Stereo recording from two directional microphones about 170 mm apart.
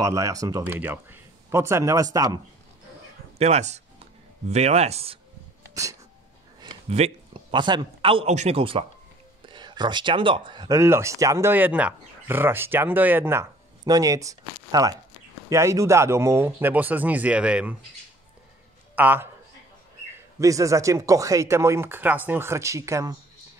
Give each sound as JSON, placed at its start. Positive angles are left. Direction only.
{"t": 0.0, "sound": "speech", "side_deg": -20}
{"t": 3.3, "sound": "speech", "side_deg": -40}
{"t": 6.9, "sound": "a man's voice", "side_deg": -35}
{"t": 18.9, "sound": "speech", "side_deg": -10}
{"t": 20.3, "sound": "speech", "side_deg": -20}